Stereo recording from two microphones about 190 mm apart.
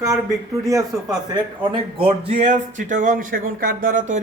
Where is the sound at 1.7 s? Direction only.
30° right (ahead or behind).